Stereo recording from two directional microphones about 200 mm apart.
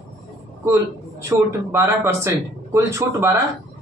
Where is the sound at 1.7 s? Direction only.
15° right (ahead or behind).